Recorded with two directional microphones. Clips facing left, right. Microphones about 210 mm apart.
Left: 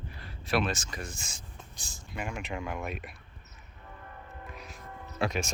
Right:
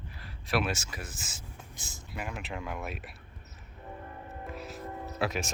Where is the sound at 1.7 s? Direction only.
20° right (ahead or behind).